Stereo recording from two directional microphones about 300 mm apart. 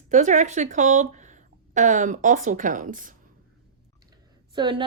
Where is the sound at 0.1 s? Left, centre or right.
Right.